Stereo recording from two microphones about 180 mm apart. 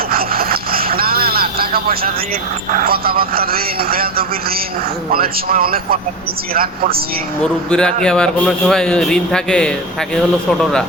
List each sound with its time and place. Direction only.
0.1 s vehicle: 55° right (ahead or behind)
2.7 s a man's voice: 55° right (ahead or behind)
7.4 s a man's voice: 5° left (ahead or behind)